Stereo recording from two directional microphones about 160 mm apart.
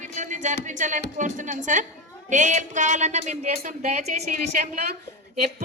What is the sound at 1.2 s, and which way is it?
Speech, 50° right (ahead or behind).